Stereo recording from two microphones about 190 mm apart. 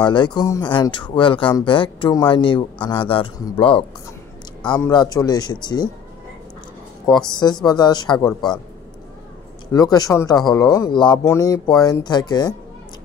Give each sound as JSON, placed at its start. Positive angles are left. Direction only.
{"t": 0.0, "sound": "speech", "side_deg": 25}
{"t": 7.2, "sound": "speech", "side_deg": 20}
{"t": 9.7, "sound": "speech", "side_deg": 20}